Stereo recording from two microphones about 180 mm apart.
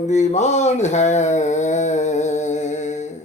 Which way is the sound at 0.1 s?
40° left (ahead or behind).